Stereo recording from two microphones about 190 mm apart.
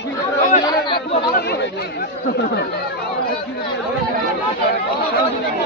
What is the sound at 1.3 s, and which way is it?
Chatter, 55° left (ahead or behind).